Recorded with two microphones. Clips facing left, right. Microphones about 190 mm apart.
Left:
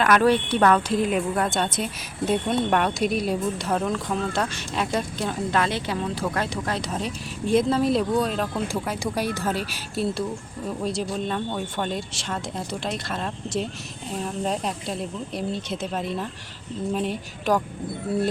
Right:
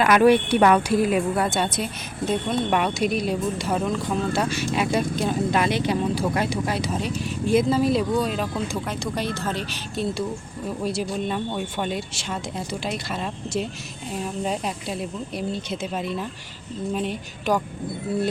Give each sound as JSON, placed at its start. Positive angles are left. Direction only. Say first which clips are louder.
{"t": 0.0, "sound": "a woman's voice", "louder": "right 3 dB", "side_deg": -10}